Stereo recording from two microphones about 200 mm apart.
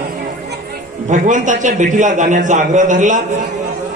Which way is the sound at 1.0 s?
40° right (ahead or behind).